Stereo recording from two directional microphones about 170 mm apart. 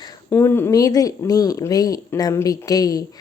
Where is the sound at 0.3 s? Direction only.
15° left (ahead or behind).